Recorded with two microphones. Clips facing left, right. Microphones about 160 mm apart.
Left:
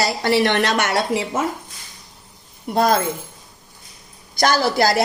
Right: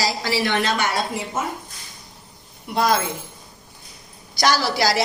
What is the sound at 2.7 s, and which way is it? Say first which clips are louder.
Speech: left 3 dB; 45° left (ahead or behind).